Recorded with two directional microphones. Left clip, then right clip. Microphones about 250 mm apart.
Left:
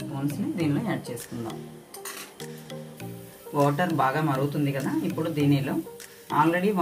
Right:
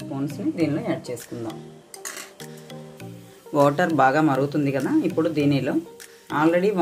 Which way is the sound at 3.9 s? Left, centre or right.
Right.